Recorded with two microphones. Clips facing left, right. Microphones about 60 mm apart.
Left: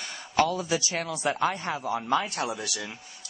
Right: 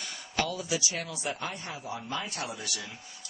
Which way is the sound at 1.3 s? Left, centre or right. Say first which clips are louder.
Left 10 dB; left.